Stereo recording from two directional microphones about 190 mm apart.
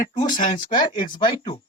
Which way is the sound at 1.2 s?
25° left (ahead or behind).